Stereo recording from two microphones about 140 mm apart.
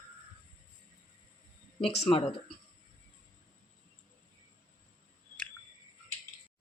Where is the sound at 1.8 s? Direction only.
45° left (ahead or behind).